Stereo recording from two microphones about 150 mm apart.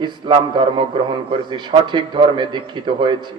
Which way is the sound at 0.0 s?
30° right (ahead or behind).